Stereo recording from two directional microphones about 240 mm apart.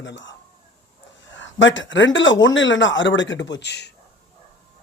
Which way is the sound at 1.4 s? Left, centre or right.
Left.